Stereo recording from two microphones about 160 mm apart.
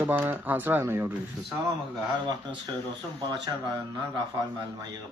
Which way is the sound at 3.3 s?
25° right (ahead or behind).